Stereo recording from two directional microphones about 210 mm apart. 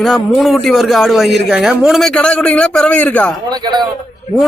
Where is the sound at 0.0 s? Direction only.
Centre (ahead or behind).